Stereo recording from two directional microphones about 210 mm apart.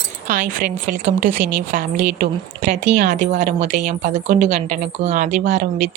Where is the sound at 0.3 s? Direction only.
40° right (ahead or behind).